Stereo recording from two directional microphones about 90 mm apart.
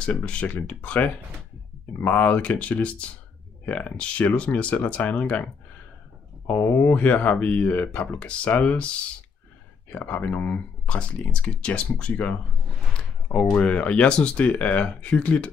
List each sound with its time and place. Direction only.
0.0 s speech: 15° left (ahead or behind)
9.9 s speech: 15° left (ahead or behind)